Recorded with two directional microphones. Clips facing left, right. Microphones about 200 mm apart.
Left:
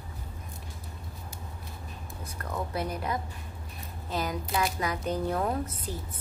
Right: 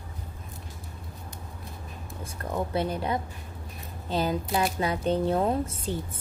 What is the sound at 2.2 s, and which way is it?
A woman's voice, 30° right (ahead or behind).